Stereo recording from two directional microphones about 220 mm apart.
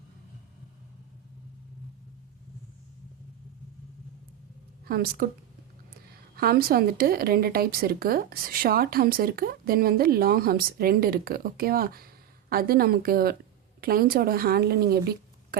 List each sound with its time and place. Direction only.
4.9 s a woman's voice: 40° right (ahead or behind)
6.3 s a woman's voice: 45° right (ahead or behind)